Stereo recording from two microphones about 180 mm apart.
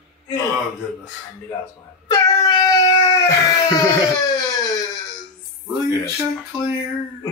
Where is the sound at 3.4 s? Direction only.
20° left (ahead or behind).